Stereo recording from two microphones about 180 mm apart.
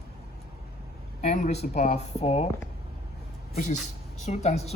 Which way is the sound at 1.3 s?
35° left (ahead or behind).